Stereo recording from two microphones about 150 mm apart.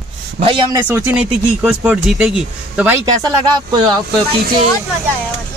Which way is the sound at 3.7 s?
30° right (ahead or behind).